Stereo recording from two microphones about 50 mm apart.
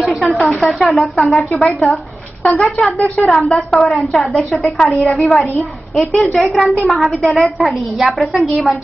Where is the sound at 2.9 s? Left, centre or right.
Left.